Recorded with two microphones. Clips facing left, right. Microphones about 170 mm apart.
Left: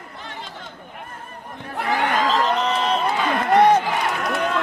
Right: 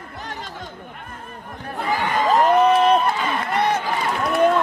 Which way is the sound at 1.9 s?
75° left (ahead or behind).